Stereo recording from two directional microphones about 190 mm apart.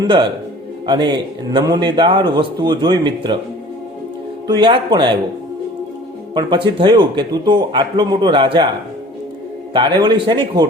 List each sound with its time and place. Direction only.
0.0 s a man's voice: 25° right (ahead or behind)
4.4 s a man's voice: 25° right (ahead or behind)
6.3 s a man's voice: 25° right (ahead or behind)
9.7 s a man's voice: 25° right (ahead or behind)